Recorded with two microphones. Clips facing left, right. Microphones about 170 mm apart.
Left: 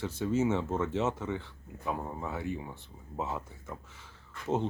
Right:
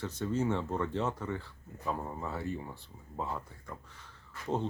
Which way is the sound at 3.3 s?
5° left (ahead or behind).